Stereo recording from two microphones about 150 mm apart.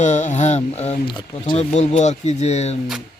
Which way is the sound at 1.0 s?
30° left (ahead or behind).